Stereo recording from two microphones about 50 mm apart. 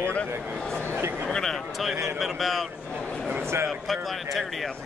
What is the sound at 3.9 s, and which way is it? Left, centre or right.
Speech, centre.